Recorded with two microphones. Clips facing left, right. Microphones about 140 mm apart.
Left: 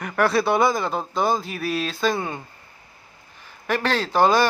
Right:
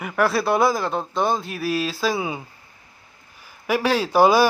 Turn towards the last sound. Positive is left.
turn(degrees=-10)  # may be behind; listen again after turning